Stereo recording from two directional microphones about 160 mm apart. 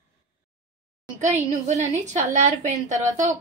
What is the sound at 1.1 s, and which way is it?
A woman's voice, 45° right (ahead or behind).